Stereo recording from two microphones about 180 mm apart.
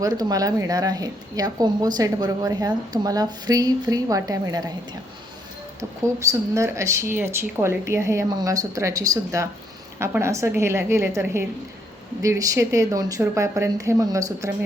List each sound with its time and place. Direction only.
0.0 s speech: 20° right (ahead or behind)
6.1 s speech: 15° right (ahead or behind)